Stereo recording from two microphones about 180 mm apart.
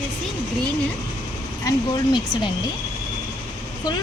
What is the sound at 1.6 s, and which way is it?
Speech, 20° left (ahead or behind).